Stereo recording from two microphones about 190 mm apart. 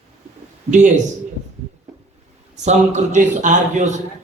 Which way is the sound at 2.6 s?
40° right (ahead or behind).